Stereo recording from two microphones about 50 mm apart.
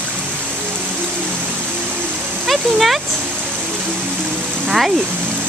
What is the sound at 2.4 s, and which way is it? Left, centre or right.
Speech, centre.